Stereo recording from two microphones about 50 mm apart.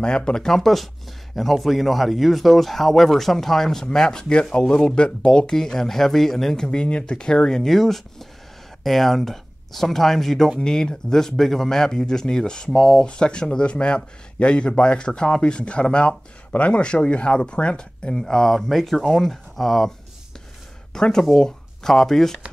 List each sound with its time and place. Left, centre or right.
0.0 s speech: centre
20.9 s speech: centre